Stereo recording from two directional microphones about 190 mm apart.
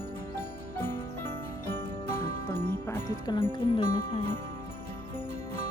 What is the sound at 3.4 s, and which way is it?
Speech, 25° left (ahead or behind).